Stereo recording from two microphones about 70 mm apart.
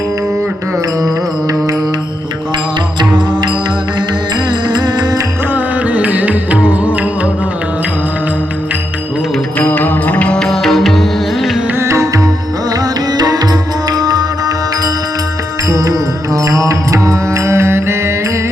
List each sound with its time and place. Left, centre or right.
1.0 s music: right
4.4 s music: right
5.5 s music: right
9.6 s music: left
10.5 s music: centre
11.8 s music: right
12.7 s music: right
15.7 s music: right